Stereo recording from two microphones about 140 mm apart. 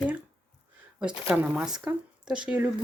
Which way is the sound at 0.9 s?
5° right (ahead or behind).